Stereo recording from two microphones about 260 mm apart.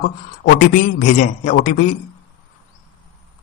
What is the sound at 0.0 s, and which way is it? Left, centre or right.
A man's voice, left.